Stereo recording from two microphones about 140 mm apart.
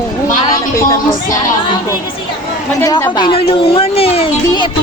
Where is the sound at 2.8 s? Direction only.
25° left (ahead or behind); by 4.2 s 45° left (ahead or behind).